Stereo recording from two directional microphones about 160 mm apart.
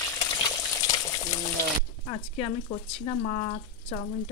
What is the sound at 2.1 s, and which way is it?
Speech, 40° left (ahead or behind).